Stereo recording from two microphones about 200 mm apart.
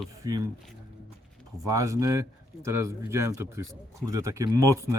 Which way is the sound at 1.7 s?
15° right (ahead or behind).